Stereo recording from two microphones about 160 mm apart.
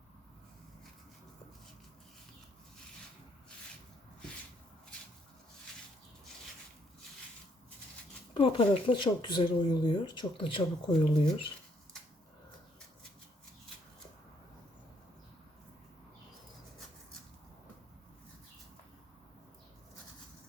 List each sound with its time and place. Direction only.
8.3 s speech: 30° left (ahead or behind)